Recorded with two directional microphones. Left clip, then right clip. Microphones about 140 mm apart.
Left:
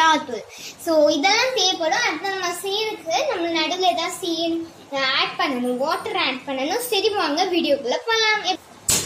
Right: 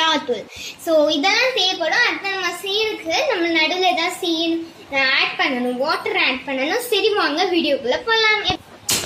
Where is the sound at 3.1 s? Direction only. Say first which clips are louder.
Right 1 dB; 35° right (ahead or behind).